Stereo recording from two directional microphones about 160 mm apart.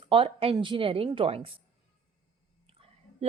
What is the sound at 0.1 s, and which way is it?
Speech, 35° right (ahead or behind).